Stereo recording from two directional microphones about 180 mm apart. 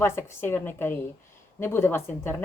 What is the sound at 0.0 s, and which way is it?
A woman's voice, 15° left (ahead or behind).